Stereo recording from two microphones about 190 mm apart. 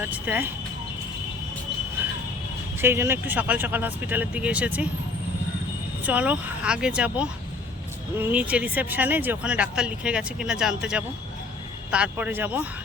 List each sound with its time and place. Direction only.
0.1 s speech: 10° right (ahead or behind)
2.8 s speech: 10° right (ahead or behind)
6.1 s speech: 10° right (ahead or behind)